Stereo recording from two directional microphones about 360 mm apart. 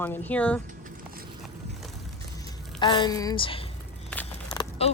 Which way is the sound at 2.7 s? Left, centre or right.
Centre.